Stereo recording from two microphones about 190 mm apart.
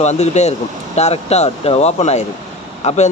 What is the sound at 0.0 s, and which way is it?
Speech, 35° left (ahead or behind).